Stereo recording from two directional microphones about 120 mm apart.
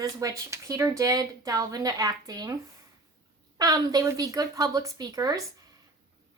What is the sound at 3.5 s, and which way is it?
Speech, 35° right (ahead or behind).